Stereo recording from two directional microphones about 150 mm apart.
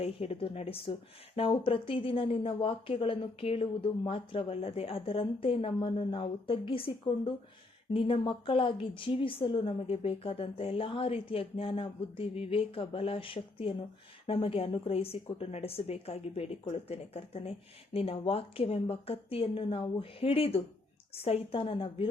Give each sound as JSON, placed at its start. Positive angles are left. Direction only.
{"t": 0.0, "sound": "speech", "side_deg": 40}